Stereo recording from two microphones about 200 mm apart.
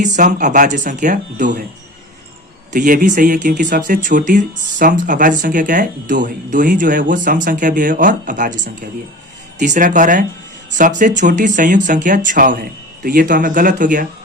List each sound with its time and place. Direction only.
0.0 s speech: 40° right (ahead or behind)
2.7 s speech: 40° right (ahead or behind)